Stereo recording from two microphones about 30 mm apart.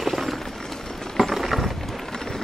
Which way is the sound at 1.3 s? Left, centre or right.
Centre.